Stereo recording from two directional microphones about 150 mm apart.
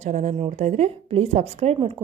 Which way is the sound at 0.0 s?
55° right (ahead or behind).